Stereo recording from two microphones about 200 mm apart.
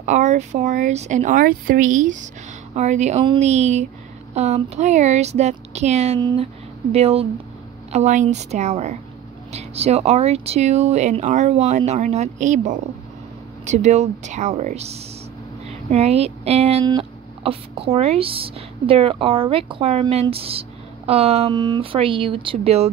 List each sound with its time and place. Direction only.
0.0 s speech: 35° right (ahead or behind)